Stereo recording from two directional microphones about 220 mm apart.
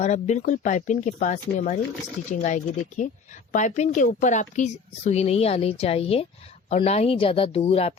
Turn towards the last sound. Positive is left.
turn(degrees=25)  # may be behind; listen again after turning